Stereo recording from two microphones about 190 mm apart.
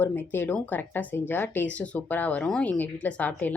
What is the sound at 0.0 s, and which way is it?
Speech, 10° left (ahead or behind).